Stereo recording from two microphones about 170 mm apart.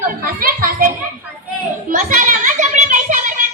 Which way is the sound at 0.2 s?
55° right (ahead or behind).